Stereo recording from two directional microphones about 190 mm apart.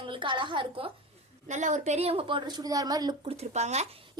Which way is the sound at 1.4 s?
40° right (ahead or behind).